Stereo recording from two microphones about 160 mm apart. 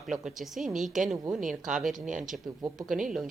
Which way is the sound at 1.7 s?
5° right (ahead or behind).